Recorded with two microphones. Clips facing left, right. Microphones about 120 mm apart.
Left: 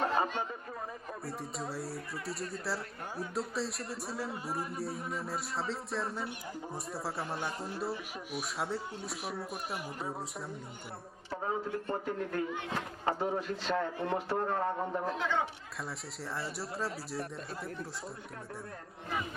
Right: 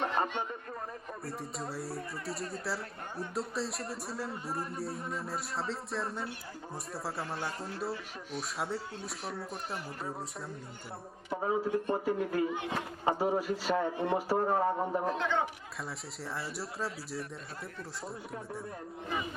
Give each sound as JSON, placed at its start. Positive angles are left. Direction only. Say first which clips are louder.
{"t": 1.2, "sound": "speech", "louder": "even", "side_deg": 0}
{"t": 7.2, "sound": "speech", "louder": "even", "side_deg": 20}
{"t": 7.8, "sound": "speech", "louder": "even", "side_deg": 0}
{"t": 11.3, "sound": "speech", "louder": "right 4 dB", "side_deg": -5}
{"t": 12.0, "sound": "speech", "louder": "right 4 dB", "side_deg": -5}